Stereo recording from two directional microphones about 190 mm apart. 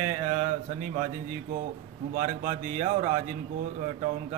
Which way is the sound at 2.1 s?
40° right (ahead or behind).